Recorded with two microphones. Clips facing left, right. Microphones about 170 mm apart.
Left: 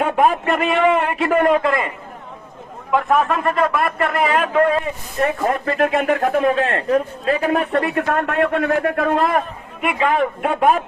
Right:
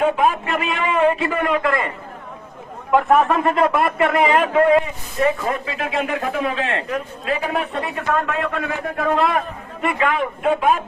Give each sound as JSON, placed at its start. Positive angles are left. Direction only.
{"t": 0.0, "sound": "a man's voice", "side_deg": 55}
{"t": 1.4, "sound": "a man's voice", "side_deg": 45}
{"t": 1.6, "sound": "a man's voice", "side_deg": 20}
{"t": 2.9, "sound": "a man's voice", "side_deg": -5}
{"t": 3.4, "sound": "speech", "side_deg": -25}
{"t": 3.8, "sound": "a man's voice", "side_deg": -5}
{"t": 5.2, "sound": "a man's voice", "side_deg": 55}